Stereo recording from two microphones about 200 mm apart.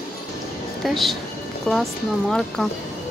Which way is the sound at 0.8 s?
Centre (ahead or behind).